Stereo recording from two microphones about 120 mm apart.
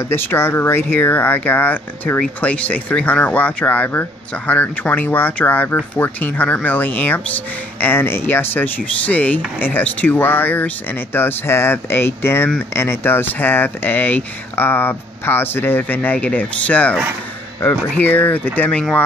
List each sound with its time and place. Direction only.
0.1 s speech: 20° left (ahead or behind)